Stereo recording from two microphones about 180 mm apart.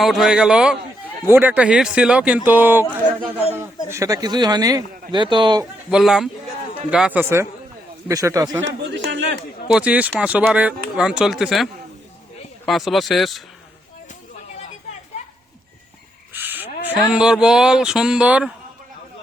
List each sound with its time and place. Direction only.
0.0 s speech: centre (ahead or behind)
3.8 s speech: 15° right (ahead or behind)
5.9 s speech: 5° right (ahead or behind)
8.6 s a man's voice: 85° right
9.7 s speech: 5° right (ahead or behind)
16.3 s owl: 10° right (ahead or behind)
16.8 s speech: 5° right (ahead or behind)